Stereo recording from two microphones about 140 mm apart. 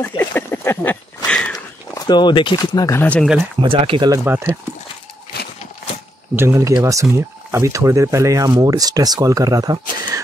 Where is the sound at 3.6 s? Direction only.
40° right (ahead or behind).